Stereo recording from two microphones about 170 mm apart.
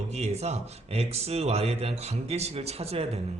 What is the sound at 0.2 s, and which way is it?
A man's voice, 40° right (ahead or behind).